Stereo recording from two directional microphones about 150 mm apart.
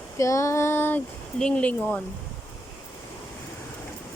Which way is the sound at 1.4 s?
10° left (ahead or behind).